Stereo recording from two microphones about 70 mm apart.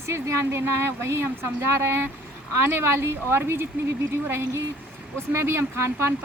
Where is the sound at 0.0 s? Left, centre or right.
Right.